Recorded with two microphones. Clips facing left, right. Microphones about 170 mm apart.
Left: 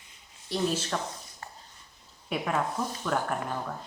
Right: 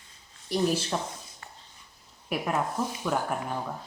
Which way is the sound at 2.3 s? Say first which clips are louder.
Right 1 dB; 5° right (ahead or behind).